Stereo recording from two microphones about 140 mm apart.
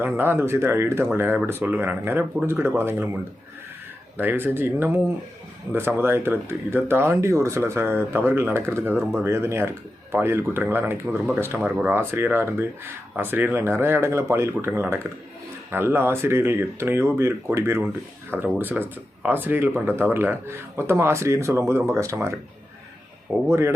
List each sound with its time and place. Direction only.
0.0 s speech: 15° right (ahead or behind)
4.2 s speech: 15° right (ahead or behind)
23.5 s speech: 20° right (ahead or behind)